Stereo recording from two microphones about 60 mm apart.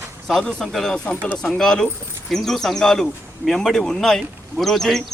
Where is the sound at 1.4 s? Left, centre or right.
Centre.